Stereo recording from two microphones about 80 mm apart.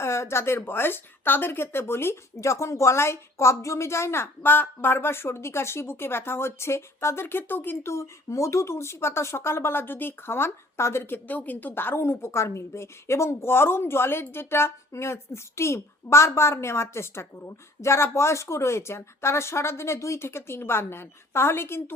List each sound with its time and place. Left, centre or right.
0.0 s speech: left